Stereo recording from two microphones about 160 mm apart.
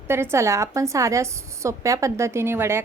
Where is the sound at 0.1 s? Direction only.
15° right (ahead or behind).